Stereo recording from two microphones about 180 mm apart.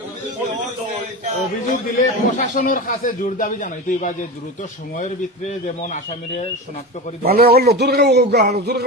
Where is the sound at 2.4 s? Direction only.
50° left (ahead or behind).